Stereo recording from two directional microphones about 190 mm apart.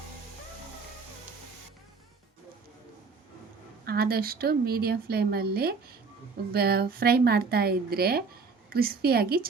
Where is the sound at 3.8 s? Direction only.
55° right (ahead or behind).